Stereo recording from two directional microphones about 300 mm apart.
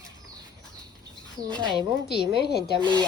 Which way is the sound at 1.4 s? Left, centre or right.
Centre.